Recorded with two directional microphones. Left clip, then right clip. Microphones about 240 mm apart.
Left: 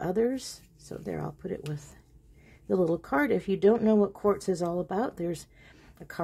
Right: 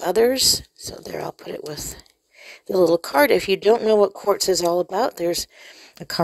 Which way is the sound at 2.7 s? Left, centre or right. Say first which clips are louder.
Right 10 dB; right.